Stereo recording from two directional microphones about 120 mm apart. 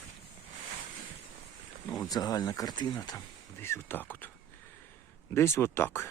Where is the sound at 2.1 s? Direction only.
30° left (ahead or behind).